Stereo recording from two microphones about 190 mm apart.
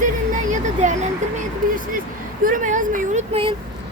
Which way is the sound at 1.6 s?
45° right (ahead or behind).